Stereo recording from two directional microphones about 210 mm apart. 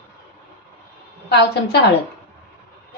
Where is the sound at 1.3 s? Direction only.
55° left (ahead or behind).